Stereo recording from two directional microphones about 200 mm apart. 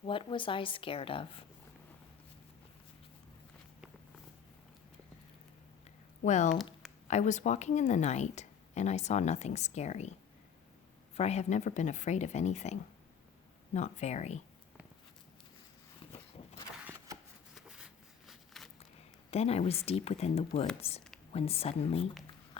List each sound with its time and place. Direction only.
0.0 s a woman's voice: 25° left (ahead or behind)
6.2 s speech: 35° left (ahead or behind)
13.7 s speech: 35° left (ahead or behind)
17.5 s a sound: 5° right (ahead or behind)
19.3 s a woman's voice: 30° left (ahead or behind)